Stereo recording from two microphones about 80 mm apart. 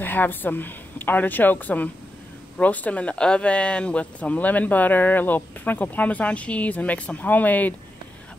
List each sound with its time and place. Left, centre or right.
0.0 s speech: left